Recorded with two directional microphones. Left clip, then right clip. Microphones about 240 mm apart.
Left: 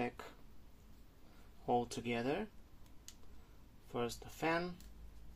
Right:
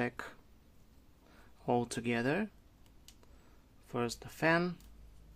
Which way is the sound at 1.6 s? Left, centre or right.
Right.